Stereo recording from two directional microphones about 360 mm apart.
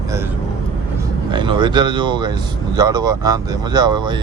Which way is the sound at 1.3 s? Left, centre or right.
Centre.